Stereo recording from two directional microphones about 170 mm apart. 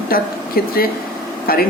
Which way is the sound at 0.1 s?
60° left (ahead or behind).